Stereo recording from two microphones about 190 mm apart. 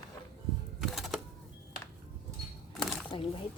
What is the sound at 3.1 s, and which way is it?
Speech, 25° left (ahead or behind).